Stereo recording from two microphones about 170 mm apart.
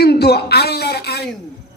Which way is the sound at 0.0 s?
70° left (ahead or behind).